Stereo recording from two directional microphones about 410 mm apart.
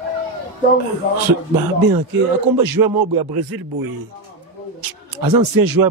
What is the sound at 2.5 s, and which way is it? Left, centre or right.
Speech, right.